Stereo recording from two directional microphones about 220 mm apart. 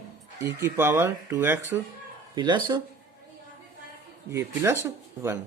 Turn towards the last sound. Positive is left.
turn(degrees=-10)  # may be behind; listen again after turning